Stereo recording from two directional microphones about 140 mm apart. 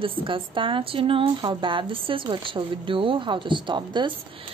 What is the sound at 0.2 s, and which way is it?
A woman's voice, 35° right (ahead or behind).